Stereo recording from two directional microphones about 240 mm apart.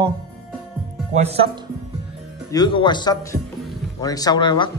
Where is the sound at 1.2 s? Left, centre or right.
Right.